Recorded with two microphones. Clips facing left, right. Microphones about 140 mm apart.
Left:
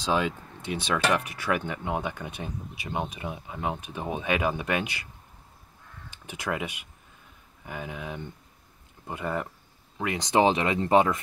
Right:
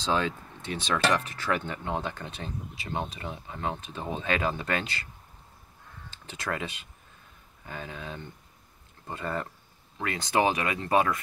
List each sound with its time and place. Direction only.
0.0 s speech: 10° left (ahead or behind)
6.0 s speech: 15° left (ahead or behind)